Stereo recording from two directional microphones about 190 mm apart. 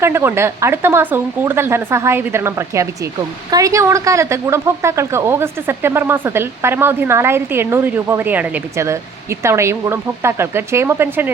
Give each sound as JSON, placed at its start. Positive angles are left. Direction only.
{"t": 0.0, "sound": "speech", "side_deg": -15}